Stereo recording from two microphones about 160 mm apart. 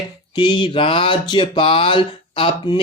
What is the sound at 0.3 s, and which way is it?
Speech, 30° left (ahead or behind).